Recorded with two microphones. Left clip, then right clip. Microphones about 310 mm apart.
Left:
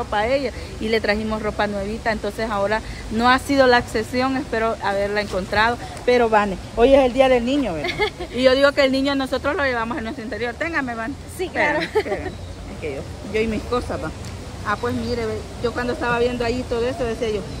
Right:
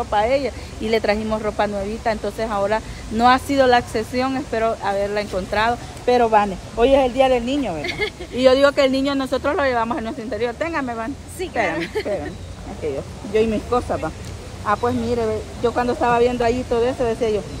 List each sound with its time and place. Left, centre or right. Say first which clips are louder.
0.1 s speech: right 2 dB; centre
7.8 s speech: left 2 dB; centre
8.4 s speech: right 1 dB; centre
11.7 s speech: left 4 dB; centre
13.7 s speech: right 3 dB; centre